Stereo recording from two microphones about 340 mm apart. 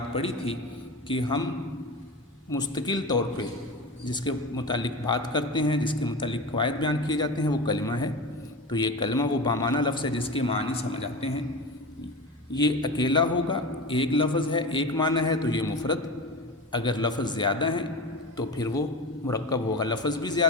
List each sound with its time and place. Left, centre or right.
0.2 s a man's voice: centre
2.5 s a man's voice: centre
12.5 s a man's voice: centre